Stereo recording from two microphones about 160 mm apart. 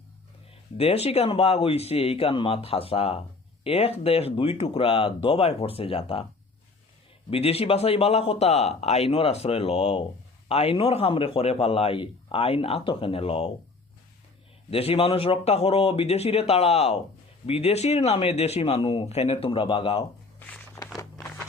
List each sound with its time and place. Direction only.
0.8 s speech: 40° left (ahead or behind)
7.3 s speech: 40° left (ahead or behind)
14.7 s speech: 40° left (ahead or behind)
20.7 s a sound: 20° left (ahead or behind)